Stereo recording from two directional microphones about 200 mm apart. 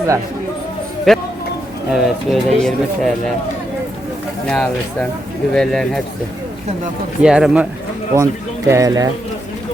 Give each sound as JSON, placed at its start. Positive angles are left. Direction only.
{"t": 1.1, "sound": "speech", "side_deg": 0}
{"t": 4.4, "sound": "speech", "side_deg": 5}
{"t": 7.2, "sound": "speech", "side_deg": -5}